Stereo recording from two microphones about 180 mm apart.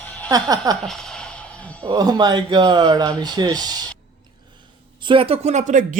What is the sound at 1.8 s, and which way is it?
Speech, 20° right (ahead or behind).